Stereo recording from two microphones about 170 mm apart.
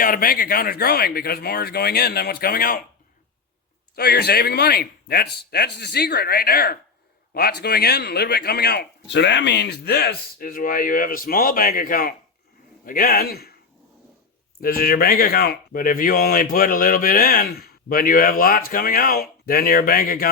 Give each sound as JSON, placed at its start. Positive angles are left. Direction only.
{"t": 0.0, "sound": "speech", "side_deg": 55}
{"t": 3.9, "sound": "speech", "side_deg": 70}
{"t": 14.6, "sound": "speech", "side_deg": 60}